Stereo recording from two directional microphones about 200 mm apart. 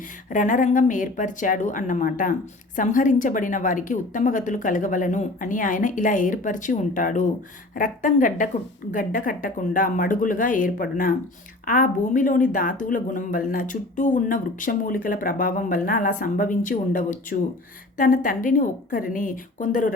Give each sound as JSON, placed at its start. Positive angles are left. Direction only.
{"t": 0.3, "sound": "a woman's voice", "side_deg": 40}